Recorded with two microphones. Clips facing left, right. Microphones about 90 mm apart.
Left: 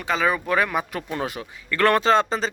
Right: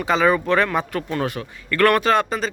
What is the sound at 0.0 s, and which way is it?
Speech, centre (ahead or behind).